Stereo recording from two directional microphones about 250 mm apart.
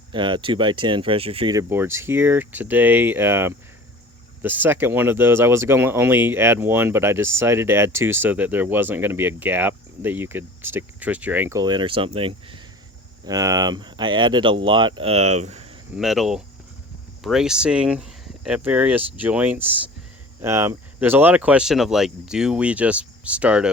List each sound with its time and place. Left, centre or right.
0.1 s speech: centre
16.0 s speech: centre